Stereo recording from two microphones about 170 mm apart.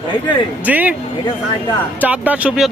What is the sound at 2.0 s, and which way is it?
Speech, 10° right (ahead or behind).